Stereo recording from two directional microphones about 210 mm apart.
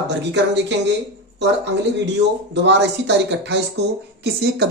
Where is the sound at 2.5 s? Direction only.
55° right (ahead or behind).